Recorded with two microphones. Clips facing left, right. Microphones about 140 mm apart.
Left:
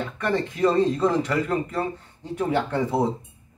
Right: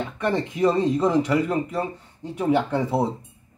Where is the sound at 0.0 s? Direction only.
20° right (ahead or behind).